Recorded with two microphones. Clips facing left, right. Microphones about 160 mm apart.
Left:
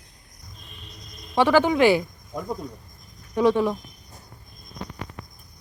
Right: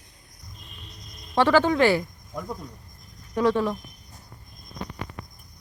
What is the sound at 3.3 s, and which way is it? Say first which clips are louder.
Speech: left 2 dB; 15° left (ahead or behind).